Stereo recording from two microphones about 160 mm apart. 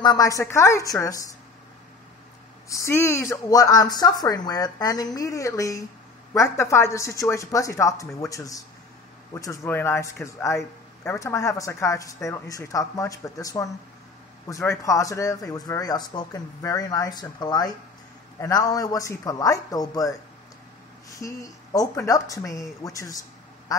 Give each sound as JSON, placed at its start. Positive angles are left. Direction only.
{"t": 0.0, "sound": "speech", "side_deg": 25}
{"t": 2.7, "sound": "speech", "side_deg": 15}
{"t": 14.7, "sound": "speech", "side_deg": 20}